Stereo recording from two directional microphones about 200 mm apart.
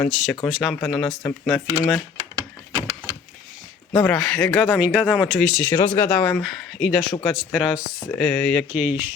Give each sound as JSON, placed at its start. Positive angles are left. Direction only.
{"t": 0.1, "sound": "speech", "side_deg": 0}
{"t": 2.3, "sound": "a sound", "side_deg": -15}
{"t": 3.9, "sound": "speech", "side_deg": 5}